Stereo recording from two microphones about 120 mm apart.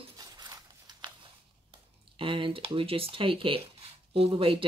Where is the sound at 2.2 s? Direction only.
45° right (ahead or behind).